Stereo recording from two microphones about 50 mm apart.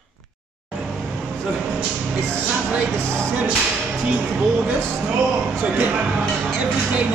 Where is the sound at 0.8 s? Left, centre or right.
Centre.